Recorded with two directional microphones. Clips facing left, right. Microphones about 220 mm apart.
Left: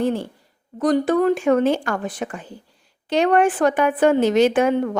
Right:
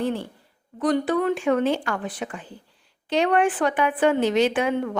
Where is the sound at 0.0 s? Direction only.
45° left (ahead or behind).